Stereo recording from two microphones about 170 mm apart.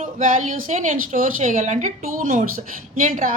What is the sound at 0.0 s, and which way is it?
A woman's voice, 50° right (ahead or behind).